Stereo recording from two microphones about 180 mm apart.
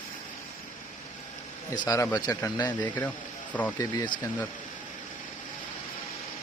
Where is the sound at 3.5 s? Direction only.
10° left (ahead or behind).